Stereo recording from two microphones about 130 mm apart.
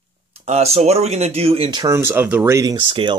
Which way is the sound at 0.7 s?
55° right (ahead or behind).